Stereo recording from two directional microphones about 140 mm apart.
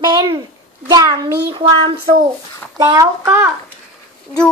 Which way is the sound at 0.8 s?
25° right (ahead or behind).